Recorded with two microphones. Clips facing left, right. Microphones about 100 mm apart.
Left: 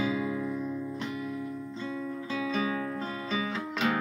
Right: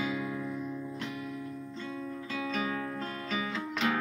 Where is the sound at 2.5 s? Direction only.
10° left (ahead or behind).